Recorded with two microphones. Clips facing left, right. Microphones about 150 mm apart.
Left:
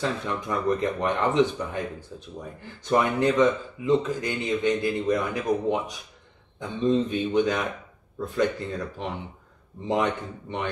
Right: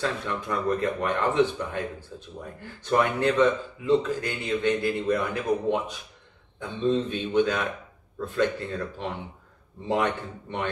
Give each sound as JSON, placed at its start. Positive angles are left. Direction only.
{"t": 0.0, "sound": "a man's voice", "side_deg": 15}
{"t": 9.8, "sound": "a man's voice", "side_deg": 15}